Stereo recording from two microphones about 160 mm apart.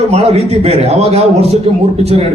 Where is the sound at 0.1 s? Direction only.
40° right (ahead or behind).